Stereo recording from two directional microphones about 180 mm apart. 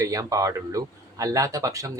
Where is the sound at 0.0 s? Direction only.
20° right (ahead or behind).